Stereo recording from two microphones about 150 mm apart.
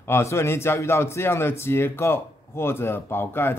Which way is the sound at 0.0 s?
15° left (ahead or behind).